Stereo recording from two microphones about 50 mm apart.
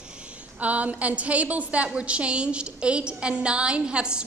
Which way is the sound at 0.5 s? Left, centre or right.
Right.